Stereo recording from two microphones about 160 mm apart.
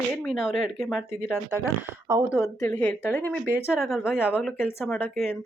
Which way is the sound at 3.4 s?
10° right (ahead or behind).